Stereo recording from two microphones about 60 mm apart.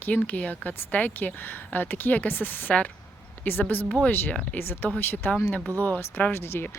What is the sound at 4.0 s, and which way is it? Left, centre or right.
Speech, left.